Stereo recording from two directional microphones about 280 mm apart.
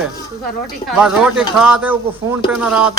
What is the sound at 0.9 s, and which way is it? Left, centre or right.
A man's voice, centre.